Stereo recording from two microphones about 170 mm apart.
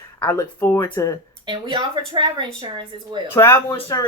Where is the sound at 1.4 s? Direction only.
25° right (ahead or behind).